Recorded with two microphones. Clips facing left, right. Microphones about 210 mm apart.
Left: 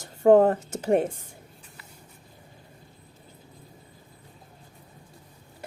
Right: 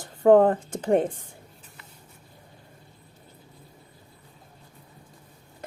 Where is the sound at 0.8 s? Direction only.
10° left (ahead or behind).